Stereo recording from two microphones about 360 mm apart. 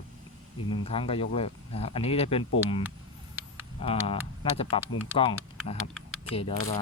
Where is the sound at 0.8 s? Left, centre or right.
Centre.